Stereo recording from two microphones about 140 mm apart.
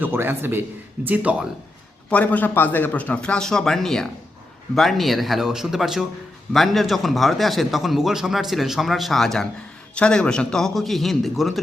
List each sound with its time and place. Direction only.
0.0 s a man's voice: 15° right (ahead or behind)
2.0 s a man's voice: 10° left (ahead or behind)